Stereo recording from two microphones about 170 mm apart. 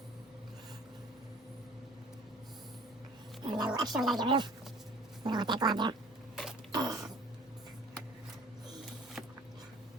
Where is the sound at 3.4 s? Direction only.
25° right (ahead or behind).